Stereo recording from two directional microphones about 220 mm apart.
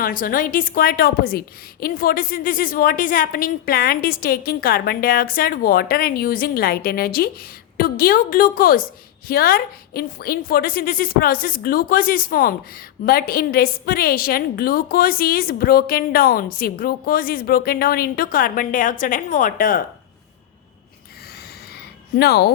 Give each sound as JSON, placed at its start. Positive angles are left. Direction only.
{"t": 0.0, "sound": "a woman's voice", "side_deg": 40}
{"t": 22.1, "sound": "speech", "side_deg": 45}